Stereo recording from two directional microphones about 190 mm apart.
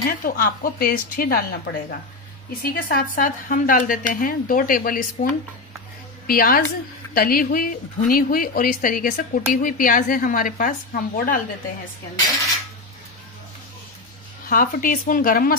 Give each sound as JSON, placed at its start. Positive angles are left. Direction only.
{"t": 0.2, "sound": "speech", "side_deg": 50}
{"t": 14.4, "sound": "speech", "side_deg": 50}